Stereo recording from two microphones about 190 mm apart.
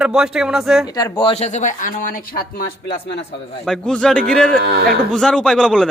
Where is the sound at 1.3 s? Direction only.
35° left (ahead or behind); by 3.6 s 60° left (ahead or behind).